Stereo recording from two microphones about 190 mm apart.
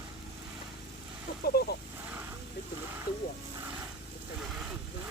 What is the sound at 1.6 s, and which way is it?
Speech, 55° left (ahead or behind).